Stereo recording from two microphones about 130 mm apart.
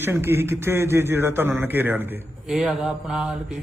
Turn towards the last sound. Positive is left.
turn(degrees=-5)  # may be behind; listen again after turning